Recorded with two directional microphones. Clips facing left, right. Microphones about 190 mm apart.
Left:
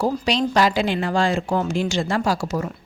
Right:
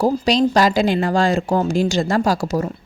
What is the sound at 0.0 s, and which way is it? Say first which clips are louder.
A woman's voice: right 5 dB; 40° right (ahead or behind).